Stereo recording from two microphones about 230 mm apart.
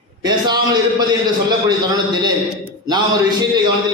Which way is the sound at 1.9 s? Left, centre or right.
Centre.